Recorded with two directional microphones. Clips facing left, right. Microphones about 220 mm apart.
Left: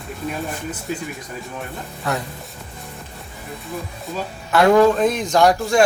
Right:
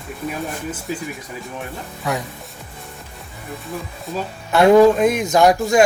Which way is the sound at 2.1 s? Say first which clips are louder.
Right 1 dB; 15° right (ahead or behind).